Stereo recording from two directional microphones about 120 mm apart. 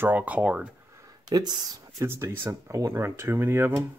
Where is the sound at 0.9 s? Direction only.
30° right (ahead or behind).